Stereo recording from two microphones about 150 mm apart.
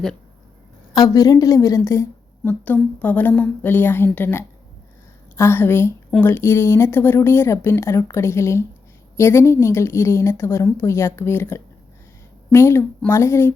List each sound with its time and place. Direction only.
0.9 s a woman's voice: 25° left (ahead or behind)